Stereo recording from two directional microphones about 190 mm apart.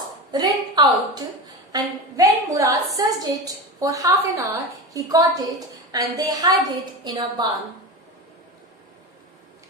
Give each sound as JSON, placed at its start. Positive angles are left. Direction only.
{"t": 0.3, "sound": "a woman's voice", "side_deg": -20}